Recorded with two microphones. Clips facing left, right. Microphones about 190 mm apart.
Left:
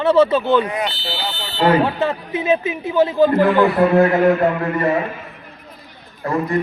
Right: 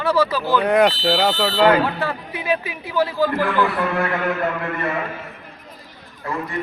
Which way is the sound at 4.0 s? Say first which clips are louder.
Left 8 dB; 40° left (ahead or behind).